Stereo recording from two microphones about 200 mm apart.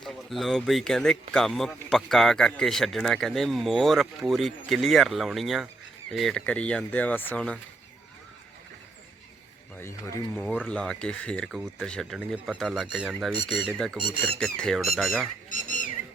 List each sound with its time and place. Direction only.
0.0 s speech: centre (ahead or behind)
9.7 s speech: 10° left (ahead or behind)
15.4 s a sound: 40° left (ahead or behind)